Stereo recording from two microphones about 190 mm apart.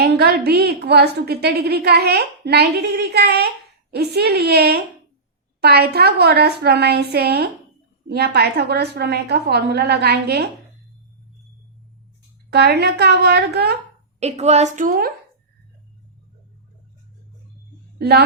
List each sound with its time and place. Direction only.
0.0 s a woman's voice: 60° right (ahead or behind)
12.5 s a woman's voice: 60° right (ahead or behind)
14.2 s a woman's voice: 35° right (ahead or behind)